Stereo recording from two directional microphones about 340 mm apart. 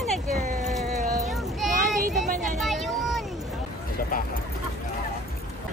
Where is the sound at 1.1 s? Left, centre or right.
Centre.